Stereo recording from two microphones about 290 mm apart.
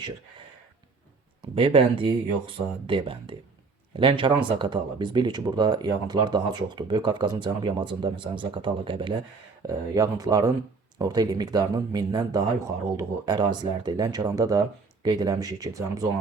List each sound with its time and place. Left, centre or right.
1.5 s speech: centre